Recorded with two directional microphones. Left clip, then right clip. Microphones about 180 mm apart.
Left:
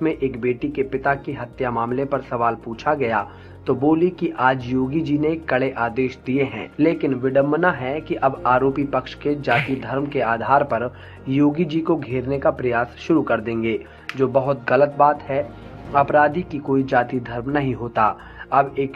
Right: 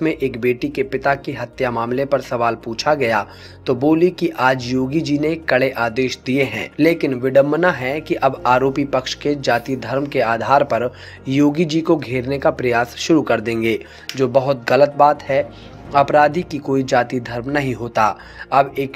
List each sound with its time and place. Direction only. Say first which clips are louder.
0.0 s speech: right 3 dB; 50° right (ahead or behind)